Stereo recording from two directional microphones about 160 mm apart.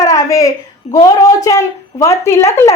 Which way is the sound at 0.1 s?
20° left (ahead or behind).